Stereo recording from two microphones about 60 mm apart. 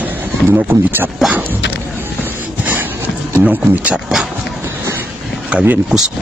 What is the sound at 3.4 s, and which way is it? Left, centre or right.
Speech, right.